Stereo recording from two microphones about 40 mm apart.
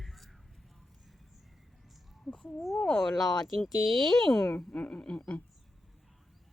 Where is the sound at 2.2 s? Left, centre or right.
Left.